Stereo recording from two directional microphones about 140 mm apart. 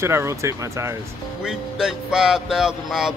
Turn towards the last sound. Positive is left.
turn(degrees=-5)  # may be behind; listen again after turning